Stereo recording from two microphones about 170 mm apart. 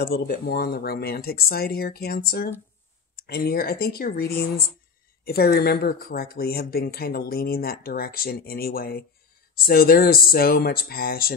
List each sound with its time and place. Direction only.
0.0 s speech: 65° left (ahead or behind)